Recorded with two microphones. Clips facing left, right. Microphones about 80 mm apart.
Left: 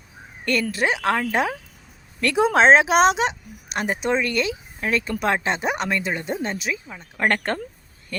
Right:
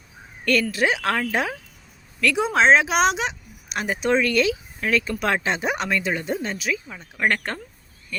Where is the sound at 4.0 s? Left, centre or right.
Centre.